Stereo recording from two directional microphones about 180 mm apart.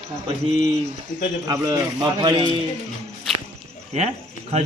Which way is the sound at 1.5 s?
20° right (ahead or behind).